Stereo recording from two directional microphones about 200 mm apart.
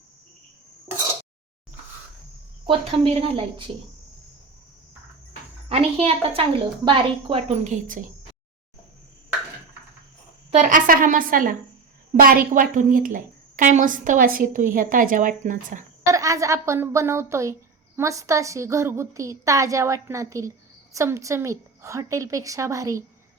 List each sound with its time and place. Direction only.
2.6 s a woman's voice: 30° right (ahead or behind)
5.6 s a woman's voice: 30° right (ahead or behind)
10.5 s a woman's voice: 40° right (ahead or behind)
16.0 s a woman's voice: 15° right (ahead or behind)